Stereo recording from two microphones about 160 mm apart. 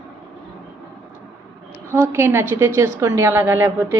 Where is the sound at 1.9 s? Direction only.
15° right (ahead or behind).